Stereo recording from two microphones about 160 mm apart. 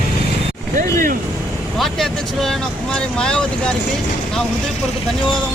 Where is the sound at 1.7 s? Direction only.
Centre (ahead or behind).